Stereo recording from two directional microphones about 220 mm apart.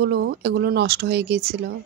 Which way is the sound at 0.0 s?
50° right (ahead or behind).